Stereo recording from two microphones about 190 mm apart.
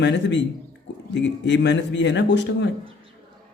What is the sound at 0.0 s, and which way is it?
A man's voice, 65° left (ahead or behind).